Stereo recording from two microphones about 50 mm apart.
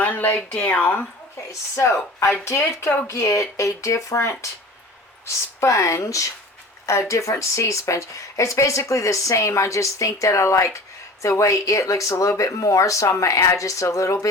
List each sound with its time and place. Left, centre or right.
0.0 s a sound: left
0.5 s speech: left
1.4 s speech: left
3.1 s speech: left